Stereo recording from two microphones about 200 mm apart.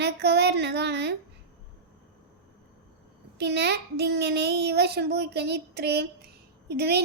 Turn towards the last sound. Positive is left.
turn(degrees=-55)  # may be behind; listen again after turning